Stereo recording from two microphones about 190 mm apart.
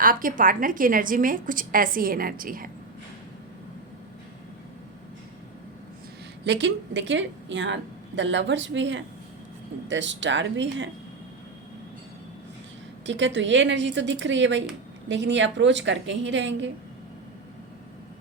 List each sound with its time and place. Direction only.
0.0 s a woman's voice: 50° right (ahead or behind)
6.4 s a woman's voice: 70° right (ahead or behind)
13.1 s a woman's voice: 70° right (ahead or behind)